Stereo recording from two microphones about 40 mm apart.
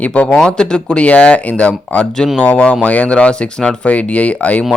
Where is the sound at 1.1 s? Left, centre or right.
Left.